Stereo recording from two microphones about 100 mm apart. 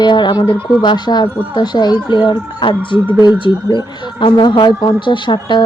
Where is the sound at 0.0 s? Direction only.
50° left (ahead or behind).